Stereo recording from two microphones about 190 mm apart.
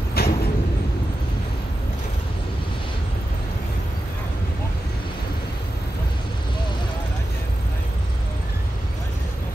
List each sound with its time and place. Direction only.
0.2 s vehicle: 55° left (ahead or behind)